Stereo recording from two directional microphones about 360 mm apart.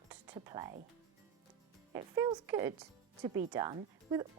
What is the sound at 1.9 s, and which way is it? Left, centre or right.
Speech, centre.